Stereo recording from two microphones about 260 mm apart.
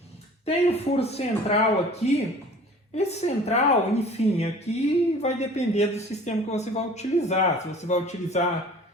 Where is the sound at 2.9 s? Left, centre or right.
Left.